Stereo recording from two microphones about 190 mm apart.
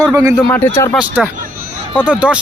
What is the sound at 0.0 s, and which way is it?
Speech, 15° right (ahead or behind).